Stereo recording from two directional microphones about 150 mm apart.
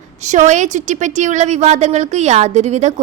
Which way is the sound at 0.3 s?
55° right (ahead or behind).